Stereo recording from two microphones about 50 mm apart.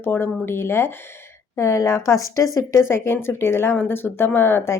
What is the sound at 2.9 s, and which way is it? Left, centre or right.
Speech, left.